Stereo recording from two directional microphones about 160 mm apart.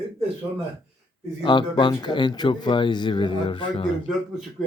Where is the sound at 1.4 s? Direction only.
30° left (ahead or behind).